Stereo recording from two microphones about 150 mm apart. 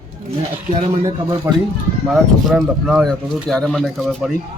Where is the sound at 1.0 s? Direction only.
20° right (ahead or behind).